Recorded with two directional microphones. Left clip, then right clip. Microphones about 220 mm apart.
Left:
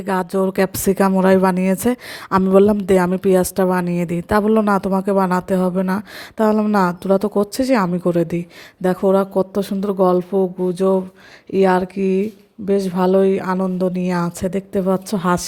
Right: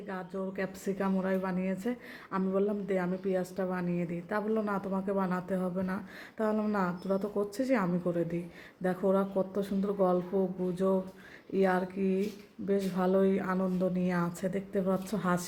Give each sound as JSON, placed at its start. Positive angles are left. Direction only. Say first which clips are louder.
{"t": 0.0, "sound": "a woman's voice", "louder": "left 19 dB", "side_deg": 50}